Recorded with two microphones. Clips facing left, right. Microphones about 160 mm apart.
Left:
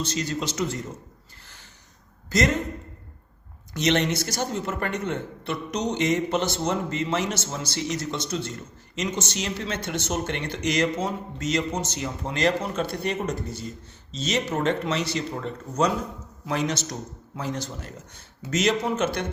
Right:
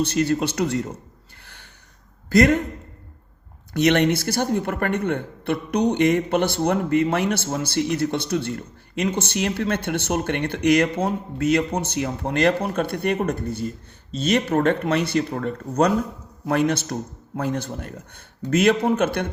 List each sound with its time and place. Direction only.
0.0 s speech: 60° right (ahead or behind)
1.5 s a sound: 60° right (ahead or behind)
2.3 s speech: 60° right (ahead or behind)
3.8 s speech: 60° right (ahead or behind)